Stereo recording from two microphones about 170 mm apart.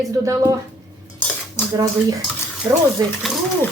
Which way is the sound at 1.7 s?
25° right (ahead or behind).